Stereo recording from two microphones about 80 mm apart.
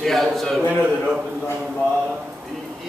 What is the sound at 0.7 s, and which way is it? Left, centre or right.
Speech, centre.